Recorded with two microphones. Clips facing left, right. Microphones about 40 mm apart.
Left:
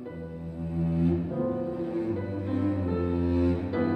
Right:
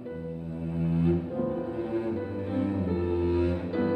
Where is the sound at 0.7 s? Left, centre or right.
Right.